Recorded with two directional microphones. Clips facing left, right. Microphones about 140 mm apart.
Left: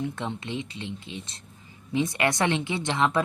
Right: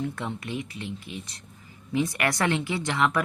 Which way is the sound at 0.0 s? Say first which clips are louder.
Even; 20° left (ahead or behind).